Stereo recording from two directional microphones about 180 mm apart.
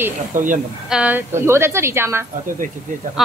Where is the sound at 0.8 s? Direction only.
5° right (ahead or behind).